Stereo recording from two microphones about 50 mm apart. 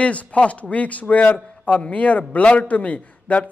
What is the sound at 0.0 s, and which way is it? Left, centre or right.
A man's voice, left.